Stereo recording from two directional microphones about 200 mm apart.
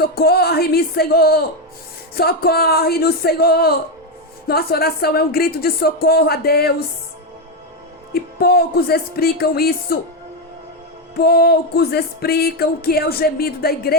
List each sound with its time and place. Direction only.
0.0 s music: 50° left (ahead or behind)
8.1 s music: 50° left (ahead or behind)
11.2 s music: 50° left (ahead or behind)